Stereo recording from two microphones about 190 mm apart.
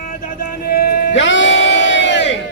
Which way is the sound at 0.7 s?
70° left (ahead or behind).